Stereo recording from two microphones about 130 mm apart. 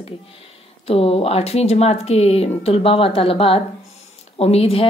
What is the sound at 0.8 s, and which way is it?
Speech, 50° left (ahead or behind).